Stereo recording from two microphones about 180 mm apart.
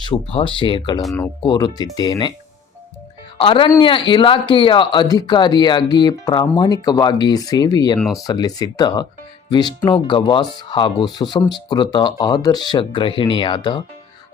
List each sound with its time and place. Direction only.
0.0 s speech: 30° left (ahead or behind)
3.4 s speech: 30° left (ahead or behind)
7.9 s speech: centre (ahead or behind)
8.2 s speech: 20° left (ahead or behind)